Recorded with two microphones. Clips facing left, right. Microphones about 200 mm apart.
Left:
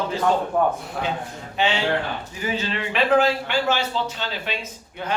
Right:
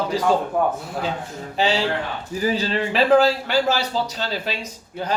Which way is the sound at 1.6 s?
35° right (ahead or behind).